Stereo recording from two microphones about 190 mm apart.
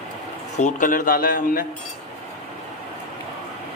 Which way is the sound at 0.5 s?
40° left (ahead or behind).